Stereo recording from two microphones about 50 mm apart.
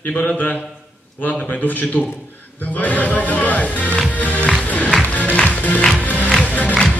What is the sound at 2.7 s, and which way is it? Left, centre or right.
Music, left.